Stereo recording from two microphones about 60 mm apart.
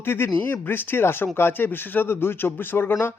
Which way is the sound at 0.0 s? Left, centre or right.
Left.